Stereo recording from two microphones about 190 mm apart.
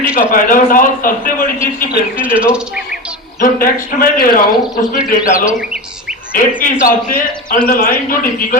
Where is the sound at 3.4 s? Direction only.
45° left (ahead or behind).